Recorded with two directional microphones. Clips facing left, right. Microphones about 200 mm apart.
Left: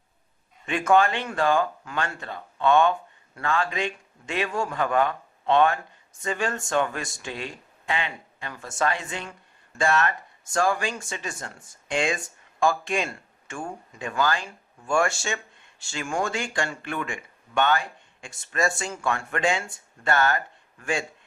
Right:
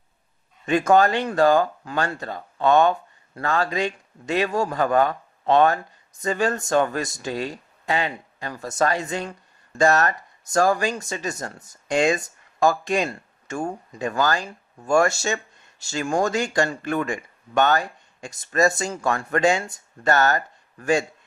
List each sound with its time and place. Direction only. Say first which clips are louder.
0.6 s speech: right 3 dB; 40° right (ahead or behind)